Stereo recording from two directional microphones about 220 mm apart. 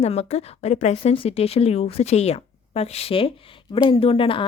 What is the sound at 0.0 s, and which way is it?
A woman's voice, 30° left (ahead or behind).